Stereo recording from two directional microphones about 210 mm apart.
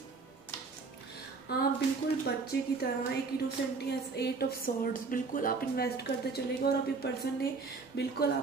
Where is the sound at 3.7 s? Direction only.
50° left (ahead or behind).